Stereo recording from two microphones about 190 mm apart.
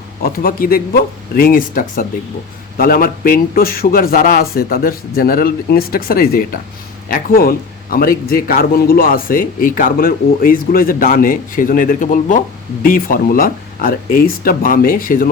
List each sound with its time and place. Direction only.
0.2 s a man's voice: 50° left (ahead or behind)